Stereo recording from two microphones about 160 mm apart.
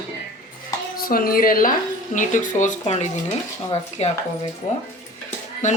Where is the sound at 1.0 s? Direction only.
65° left (ahead or behind); by 4.1 s 40° left (ahead or behind).